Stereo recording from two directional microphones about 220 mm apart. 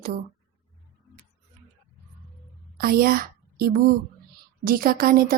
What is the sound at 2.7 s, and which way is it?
A woman's voice, 40° right (ahead or behind).